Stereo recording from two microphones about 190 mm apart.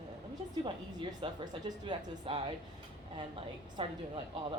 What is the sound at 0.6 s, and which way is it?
A woman's voice, 25° right (ahead or behind).